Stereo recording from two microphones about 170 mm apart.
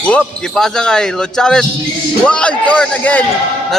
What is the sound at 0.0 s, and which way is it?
A man's voice, 5° left (ahead or behind).